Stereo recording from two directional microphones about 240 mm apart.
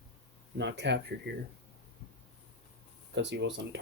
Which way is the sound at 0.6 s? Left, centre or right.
Right.